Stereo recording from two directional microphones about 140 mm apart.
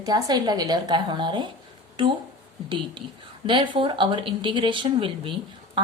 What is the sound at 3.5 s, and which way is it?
Speech, 35° right (ahead or behind).